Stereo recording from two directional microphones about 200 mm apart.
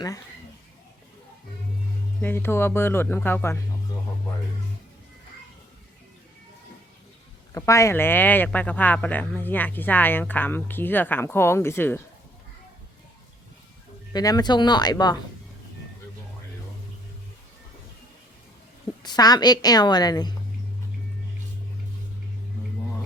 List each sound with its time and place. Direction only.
2.2 s speech: 10° left (ahead or behind)
7.5 s speech: 15° left (ahead or behind)
14.1 s a woman's voice: 20° left (ahead or behind)
19.0 s a woman's voice: 20° left (ahead or behind)